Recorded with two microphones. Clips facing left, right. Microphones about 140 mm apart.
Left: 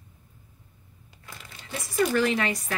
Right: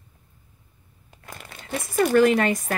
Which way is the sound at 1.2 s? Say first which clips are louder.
Right 5 dB; 50° right (ahead or behind).